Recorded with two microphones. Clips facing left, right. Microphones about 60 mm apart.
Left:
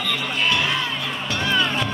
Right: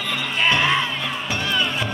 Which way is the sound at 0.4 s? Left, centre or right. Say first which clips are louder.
Right 4 dB; right.